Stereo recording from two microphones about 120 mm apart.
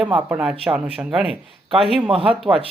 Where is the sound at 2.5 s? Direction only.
20° right (ahead or behind).